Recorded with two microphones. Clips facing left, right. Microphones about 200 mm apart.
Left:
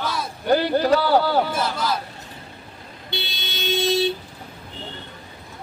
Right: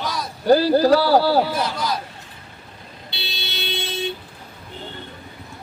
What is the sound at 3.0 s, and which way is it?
Vehicle, 50° left (ahead or behind).